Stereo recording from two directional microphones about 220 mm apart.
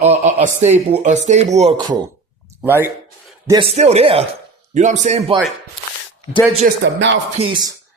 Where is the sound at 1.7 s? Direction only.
20° right (ahead or behind).